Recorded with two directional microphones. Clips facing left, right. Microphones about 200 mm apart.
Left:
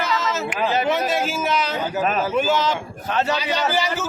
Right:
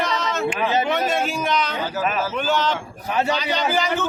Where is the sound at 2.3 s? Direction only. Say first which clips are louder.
Left 2 dB; 5° left (ahead or behind).